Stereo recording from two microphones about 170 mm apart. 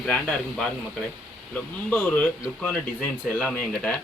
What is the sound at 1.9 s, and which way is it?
Speech, 10° left (ahead or behind).